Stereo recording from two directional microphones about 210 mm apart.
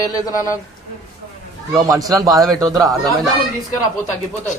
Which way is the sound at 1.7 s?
15° right (ahead or behind).